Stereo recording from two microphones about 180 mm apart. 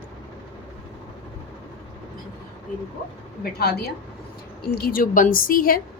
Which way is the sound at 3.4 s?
60° left (ahead or behind).